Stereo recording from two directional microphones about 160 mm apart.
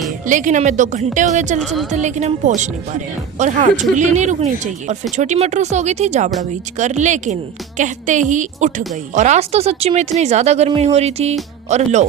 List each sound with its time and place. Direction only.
0.3 s speech: 55° right (ahead or behind)
1.6 s speech: centre (ahead or behind)
1.9 s speech: 45° right (ahead or behind)